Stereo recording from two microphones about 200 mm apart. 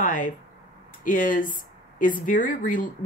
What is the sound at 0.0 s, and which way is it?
Speech, 40° left (ahead or behind).